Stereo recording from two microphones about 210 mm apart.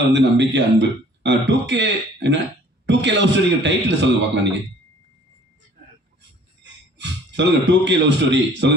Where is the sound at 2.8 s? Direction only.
55° right (ahead or behind).